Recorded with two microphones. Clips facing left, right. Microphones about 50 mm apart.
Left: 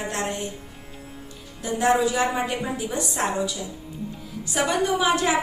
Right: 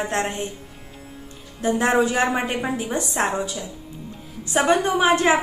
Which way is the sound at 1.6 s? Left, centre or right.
Right.